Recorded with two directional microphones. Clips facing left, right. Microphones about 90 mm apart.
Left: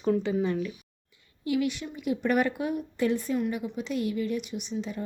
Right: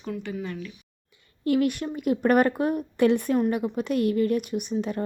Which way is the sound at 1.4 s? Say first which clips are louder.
Right 5 dB; 50° right (ahead or behind).